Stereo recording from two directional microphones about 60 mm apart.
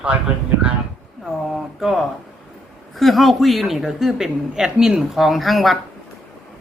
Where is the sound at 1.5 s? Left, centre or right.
Centre.